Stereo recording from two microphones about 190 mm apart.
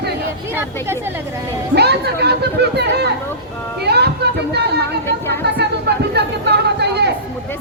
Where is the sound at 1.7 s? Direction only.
60° right (ahead or behind).